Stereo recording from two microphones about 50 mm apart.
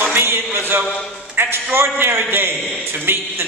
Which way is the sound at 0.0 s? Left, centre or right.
Right.